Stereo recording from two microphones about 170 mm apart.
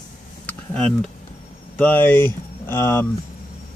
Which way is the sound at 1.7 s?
10° left (ahead or behind).